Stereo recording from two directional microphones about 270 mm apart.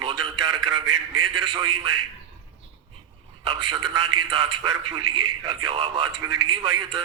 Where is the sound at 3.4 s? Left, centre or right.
Centre.